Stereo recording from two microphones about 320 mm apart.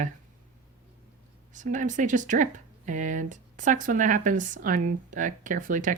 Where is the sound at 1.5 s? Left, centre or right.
Right.